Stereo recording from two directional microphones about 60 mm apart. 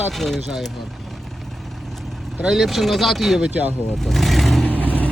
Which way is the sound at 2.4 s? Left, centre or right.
Centre.